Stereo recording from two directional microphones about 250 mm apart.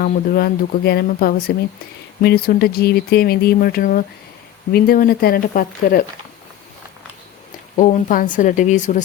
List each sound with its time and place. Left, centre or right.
0.0 s speech: left
7.8 s speech: left